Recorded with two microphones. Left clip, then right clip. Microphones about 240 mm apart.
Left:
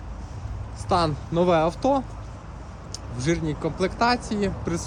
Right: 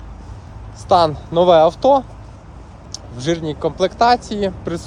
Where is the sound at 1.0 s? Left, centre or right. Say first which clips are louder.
Right 9 dB; right.